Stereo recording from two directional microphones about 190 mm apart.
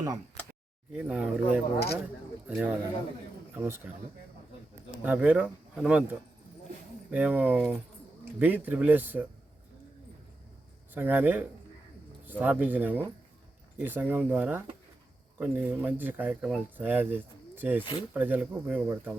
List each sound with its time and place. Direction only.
0.0 s speech: 20° right (ahead or behind)
0.9 s a man's voice: 5° right (ahead or behind)
5.0 s speech: 10° right (ahead or behind)
10.9 s speech: 10° right (ahead or behind)